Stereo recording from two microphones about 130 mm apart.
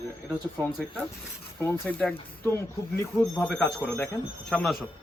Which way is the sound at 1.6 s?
10° left (ahead or behind).